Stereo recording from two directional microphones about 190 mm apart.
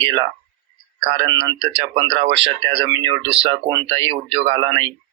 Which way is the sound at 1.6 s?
30° right (ahead or behind).